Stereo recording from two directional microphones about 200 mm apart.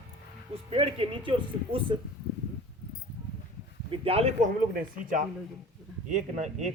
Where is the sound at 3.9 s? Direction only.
30° right (ahead or behind).